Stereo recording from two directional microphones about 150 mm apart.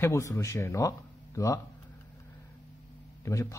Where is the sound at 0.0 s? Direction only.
20° left (ahead or behind).